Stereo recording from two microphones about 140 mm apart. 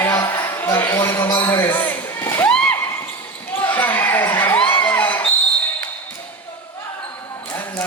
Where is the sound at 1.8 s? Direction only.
15° left (ahead or behind).